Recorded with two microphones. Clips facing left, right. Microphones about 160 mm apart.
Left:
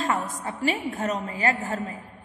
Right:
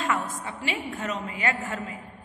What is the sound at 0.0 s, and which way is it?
A woman's voice, 40° left (ahead or behind).